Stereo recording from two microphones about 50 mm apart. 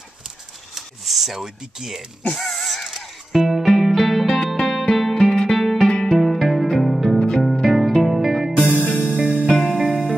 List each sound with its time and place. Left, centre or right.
0.7 s a sound: centre
1.4 s speech: centre
2.3 s music: centre
6.1 s music: centre
7.2 s music: centre
8.6 s music: left
9.2 s music: right
9.5 s music: centre
9.8 s music: right